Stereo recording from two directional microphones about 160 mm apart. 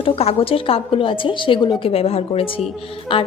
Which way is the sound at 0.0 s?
35° left (ahead or behind).